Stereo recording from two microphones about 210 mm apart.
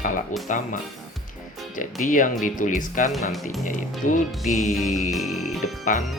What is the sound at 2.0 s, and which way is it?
Speech, 40° left (ahead or behind).